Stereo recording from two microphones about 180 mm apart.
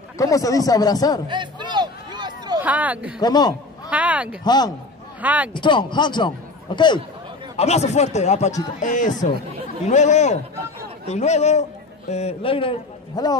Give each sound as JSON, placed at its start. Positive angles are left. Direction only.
{"t": 0.2, "sound": "a man's voice", "side_deg": 20}
{"t": 1.3, "sound": "music", "side_deg": -25}
{"t": 2.6, "sound": "speech", "side_deg": -10}
{"t": 3.2, "sound": "a man's voice", "side_deg": 20}
{"t": 3.9, "sound": "speech", "side_deg": -5}
{"t": 4.5, "sound": "a man's voice", "side_deg": 20}
{"t": 5.2, "sound": "speech", "side_deg": -10}
{"t": 5.5, "sound": "a man's voice", "side_deg": 25}
{"t": 7.5, "sound": "a man's voice", "side_deg": 35}